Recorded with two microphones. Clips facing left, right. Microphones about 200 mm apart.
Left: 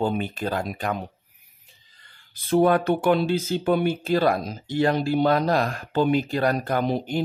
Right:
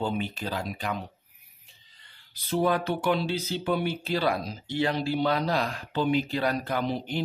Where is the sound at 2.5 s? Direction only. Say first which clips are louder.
Left 7 dB; 55° left (ahead or behind).